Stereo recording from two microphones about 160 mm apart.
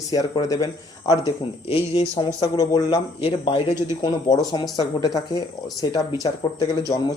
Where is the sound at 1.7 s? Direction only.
35° left (ahead or behind).